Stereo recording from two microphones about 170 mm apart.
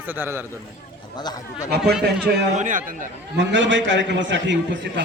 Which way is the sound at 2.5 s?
50° right (ahead or behind).